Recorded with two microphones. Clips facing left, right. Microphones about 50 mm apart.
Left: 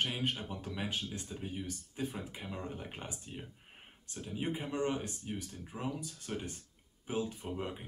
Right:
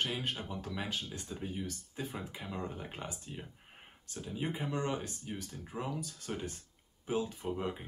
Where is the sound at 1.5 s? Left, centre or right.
Left.